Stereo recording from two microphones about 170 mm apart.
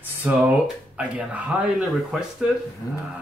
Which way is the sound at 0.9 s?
10° right (ahead or behind).